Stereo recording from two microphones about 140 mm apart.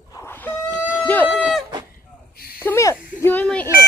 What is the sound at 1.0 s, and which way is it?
Run, 10° left (ahead or behind).